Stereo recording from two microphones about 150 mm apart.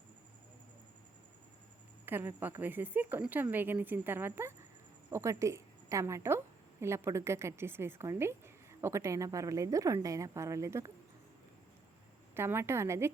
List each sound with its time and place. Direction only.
2.0 s a woman's voice: 15° right (ahead or behind)
12.3 s speech: 15° right (ahead or behind)